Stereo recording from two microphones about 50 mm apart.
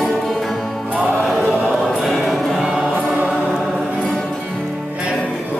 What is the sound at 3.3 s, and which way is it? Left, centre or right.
Music, centre.